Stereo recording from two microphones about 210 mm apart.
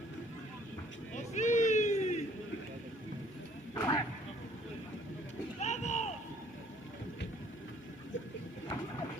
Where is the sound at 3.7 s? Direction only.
15° left (ahead or behind).